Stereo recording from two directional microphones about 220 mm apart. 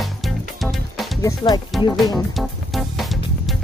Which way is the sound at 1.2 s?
20° left (ahead or behind).